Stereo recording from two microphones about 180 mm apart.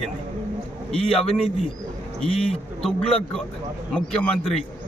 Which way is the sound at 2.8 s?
5° left (ahead or behind).